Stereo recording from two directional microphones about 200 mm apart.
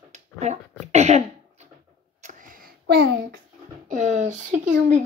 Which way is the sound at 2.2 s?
45° right (ahead or behind).